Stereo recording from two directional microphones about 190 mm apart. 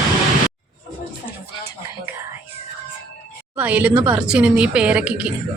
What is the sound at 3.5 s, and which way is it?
A woman's voice, 10° right (ahead or behind).